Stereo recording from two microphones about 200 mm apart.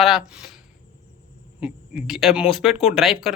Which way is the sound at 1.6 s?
5° right (ahead or behind).